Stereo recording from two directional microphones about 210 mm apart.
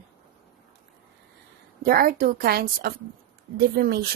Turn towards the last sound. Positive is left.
turn(degrees=-50)  # may be behind; listen again after turning